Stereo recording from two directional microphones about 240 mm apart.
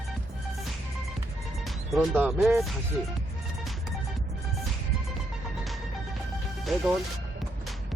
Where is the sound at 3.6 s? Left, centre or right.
Centre.